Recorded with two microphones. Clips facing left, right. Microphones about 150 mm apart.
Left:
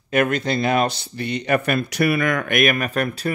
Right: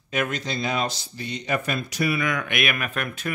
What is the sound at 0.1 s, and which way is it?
Speech, 55° left (ahead or behind).